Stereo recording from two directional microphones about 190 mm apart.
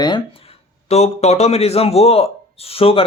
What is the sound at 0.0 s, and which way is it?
Speech, 25° left (ahead or behind).